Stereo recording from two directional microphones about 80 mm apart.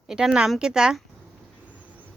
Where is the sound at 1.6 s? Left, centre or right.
Centre.